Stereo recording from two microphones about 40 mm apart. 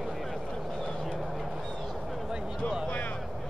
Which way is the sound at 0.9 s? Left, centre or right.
Centre.